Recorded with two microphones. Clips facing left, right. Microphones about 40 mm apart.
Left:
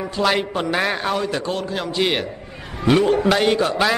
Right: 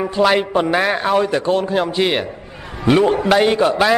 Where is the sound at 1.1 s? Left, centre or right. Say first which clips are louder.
Right 7 dB; right.